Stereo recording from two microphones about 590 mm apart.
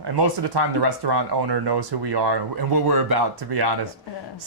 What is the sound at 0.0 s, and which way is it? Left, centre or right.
Speech, right.